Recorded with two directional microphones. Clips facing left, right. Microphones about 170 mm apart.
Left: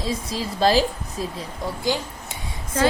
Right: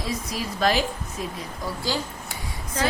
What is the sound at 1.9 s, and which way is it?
Speech, 20° left (ahead or behind).